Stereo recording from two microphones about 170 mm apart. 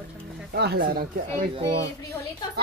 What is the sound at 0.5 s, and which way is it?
Speech, 70° right (ahead or behind).